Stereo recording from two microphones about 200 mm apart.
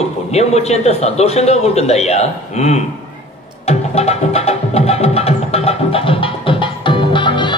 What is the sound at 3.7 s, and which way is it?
Music, 30° left (ahead or behind).